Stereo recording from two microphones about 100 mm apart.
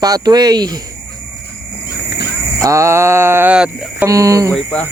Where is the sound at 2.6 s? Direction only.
30° right (ahead or behind).